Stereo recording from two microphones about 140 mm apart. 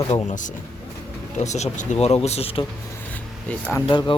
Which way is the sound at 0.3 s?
65° left (ahead or behind).